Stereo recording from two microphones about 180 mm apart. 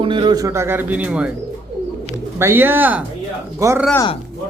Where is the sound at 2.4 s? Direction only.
10° right (ahead or behind).